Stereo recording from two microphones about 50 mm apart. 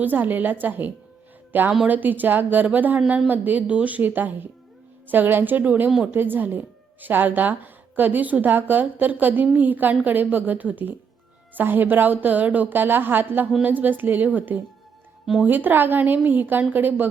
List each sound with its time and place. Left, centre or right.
0.0 s a woman's voice: right